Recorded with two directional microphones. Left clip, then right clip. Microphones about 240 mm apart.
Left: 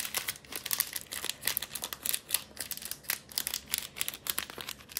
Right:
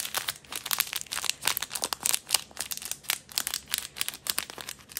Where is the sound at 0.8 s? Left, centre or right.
Centre.